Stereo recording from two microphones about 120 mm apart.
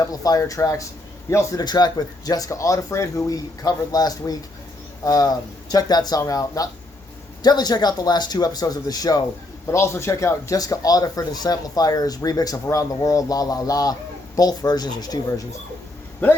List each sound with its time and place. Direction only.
0.0 s speech: 30° left (ahead or behind)
1.6 s speech: 35° left (ahead or behind)